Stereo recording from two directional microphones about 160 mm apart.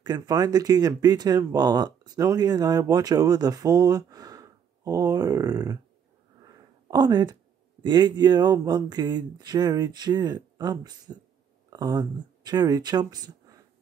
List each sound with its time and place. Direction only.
0.0 s speech: 25° right (ahead or behind)
6.4 s a sound: 25° right (ahead or behind)
7.8 s speech: 25° right (ahead or behind)